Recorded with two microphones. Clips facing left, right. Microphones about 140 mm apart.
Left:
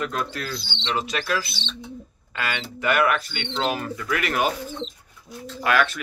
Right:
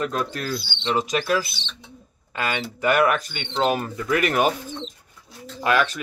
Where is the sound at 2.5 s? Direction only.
35° right (ahead or behind).